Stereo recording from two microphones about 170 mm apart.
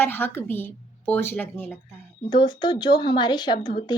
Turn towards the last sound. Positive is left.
turn(degrees=25)  # may be behind; listen again after turning